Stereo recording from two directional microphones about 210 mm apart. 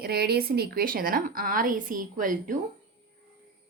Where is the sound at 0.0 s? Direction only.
50° right (ahead or behind).